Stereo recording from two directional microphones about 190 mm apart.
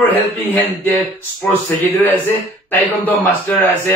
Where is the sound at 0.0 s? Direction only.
10° left (ahead or behind).